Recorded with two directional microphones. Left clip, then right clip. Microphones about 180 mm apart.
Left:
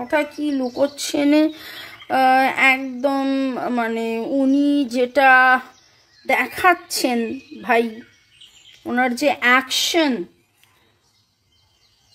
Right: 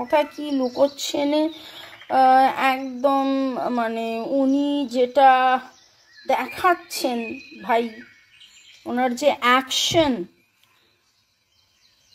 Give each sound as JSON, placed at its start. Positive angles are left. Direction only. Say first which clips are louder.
{"t": 0.0, "sound": "a woman's voice", "louder": "even", "side_deg": 0}
{"t": 8.8, "sound": "speech", "louder": "left 2 dB", "side_deg": 15}